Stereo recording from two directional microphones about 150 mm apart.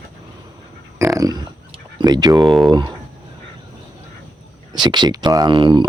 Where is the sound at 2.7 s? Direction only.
30° right (ahead or behind).